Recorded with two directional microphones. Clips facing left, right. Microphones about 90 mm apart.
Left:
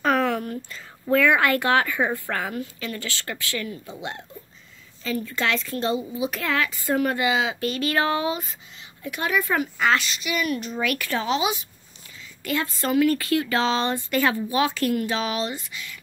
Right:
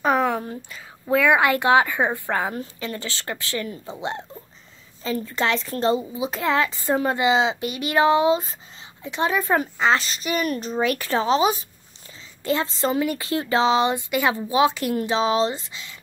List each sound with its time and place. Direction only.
0.0 s a sound: 15° right (ahead or behind)
0.7 s speech: 15° right (ahead or behind)
2.5 s speech: 30° right (ahead or behind)
12.4 s speech: 25° right (ahead or behind)